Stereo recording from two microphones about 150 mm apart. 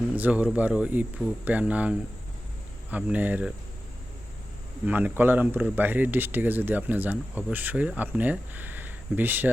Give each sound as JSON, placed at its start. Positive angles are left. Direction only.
{"t": 0.2, "sound": "speech", "side_deg": -10}
{"t": 4.9, "sound": "speech", "side_deg": -10}